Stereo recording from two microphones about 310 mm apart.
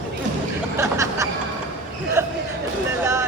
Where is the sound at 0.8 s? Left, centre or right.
Centre.